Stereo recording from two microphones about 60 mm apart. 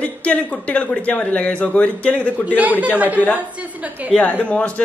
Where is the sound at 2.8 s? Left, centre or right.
Right.